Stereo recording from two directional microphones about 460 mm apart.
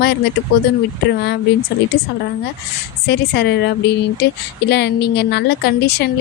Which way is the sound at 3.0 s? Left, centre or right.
Left.